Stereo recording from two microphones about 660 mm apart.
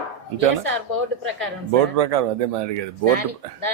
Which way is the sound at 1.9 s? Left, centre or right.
Right.